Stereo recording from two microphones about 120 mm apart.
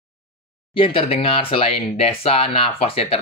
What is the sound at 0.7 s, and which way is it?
Speech, 45° left (ahead or behind).